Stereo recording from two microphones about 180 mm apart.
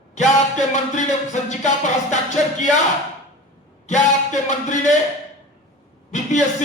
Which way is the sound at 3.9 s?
40° left (ahead or behind).